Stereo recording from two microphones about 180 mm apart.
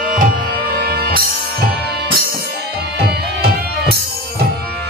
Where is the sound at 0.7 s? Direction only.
60° right (ahead or behind).